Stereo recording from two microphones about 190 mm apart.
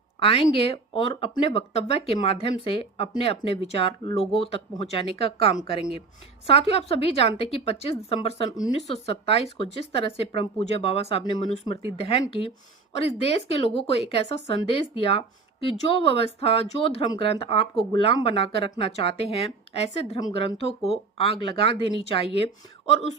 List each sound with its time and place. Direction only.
0.2 s a woman's voice: 30° left (ahead or behind)